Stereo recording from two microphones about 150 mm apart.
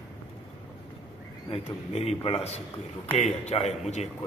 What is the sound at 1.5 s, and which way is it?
A man's voice, 40° left (ahead or behind).